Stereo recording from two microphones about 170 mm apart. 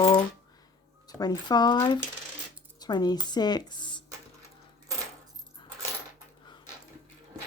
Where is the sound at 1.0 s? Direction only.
20° left (ahead or behind).